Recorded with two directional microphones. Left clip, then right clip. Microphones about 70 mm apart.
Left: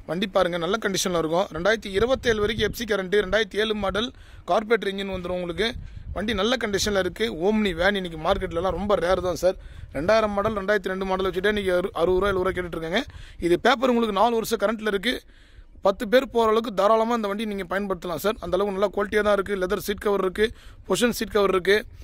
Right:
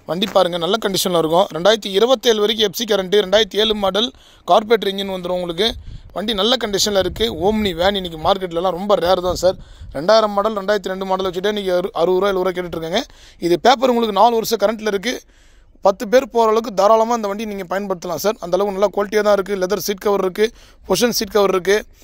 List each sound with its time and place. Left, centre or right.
0.2 s speech: right
0.7 s speech: right
5.0 s speech: right
6.2 s speech: right